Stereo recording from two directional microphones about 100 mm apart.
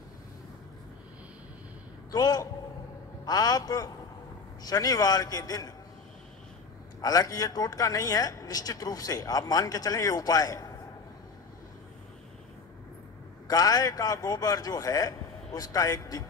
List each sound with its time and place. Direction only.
2.0 s a man's voice: 40° left (ahead or behind)
7.0 s speech: 40° left (ahead or behind)
13.5 s speech: 40° left (ahead or behind)